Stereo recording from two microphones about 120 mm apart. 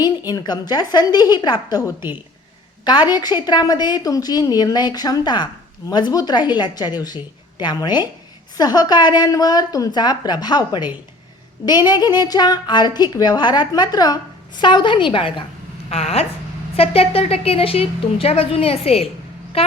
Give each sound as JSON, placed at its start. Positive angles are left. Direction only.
{"t": 0.3, "sound": "a woman's voice", "side_deg": 35}
{"t": 2.8, "sound": "a woman's voice", "side_deg": 35}
{"t": 15.9, "sound": "a woman's voice", "side_deg": 60}